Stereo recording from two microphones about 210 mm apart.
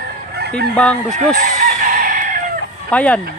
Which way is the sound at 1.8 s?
40° right (ahead or behind).